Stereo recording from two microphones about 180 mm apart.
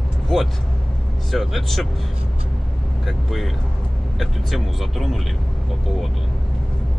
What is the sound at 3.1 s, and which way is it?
Speech, centre (ahead or behind).